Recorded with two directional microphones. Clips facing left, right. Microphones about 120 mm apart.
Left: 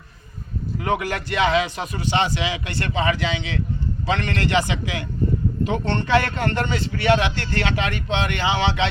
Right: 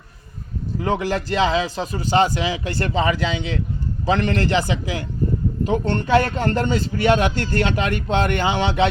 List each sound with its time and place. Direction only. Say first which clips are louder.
0.8 s a man's voice: right 2 dB; 30° right (ahead or behind); by 8.9 s 45° right (ahead or behind)